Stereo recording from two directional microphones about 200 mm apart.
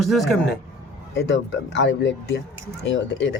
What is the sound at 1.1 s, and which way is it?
Speech, 65° left (ahead or behind).